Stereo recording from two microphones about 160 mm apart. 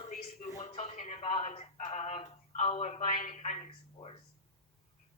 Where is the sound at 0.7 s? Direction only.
45° left (ahead or behind).